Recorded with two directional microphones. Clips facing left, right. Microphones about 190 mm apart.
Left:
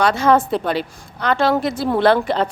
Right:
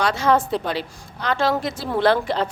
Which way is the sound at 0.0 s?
55° left (ahead or behind).